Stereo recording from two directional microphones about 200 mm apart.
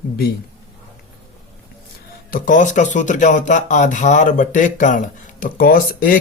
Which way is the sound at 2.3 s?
40° left (ahead or behind).